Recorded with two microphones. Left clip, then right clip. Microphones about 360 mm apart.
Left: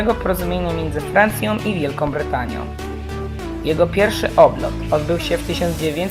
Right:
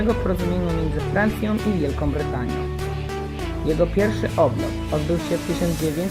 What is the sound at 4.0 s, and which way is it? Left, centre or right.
Speech, left.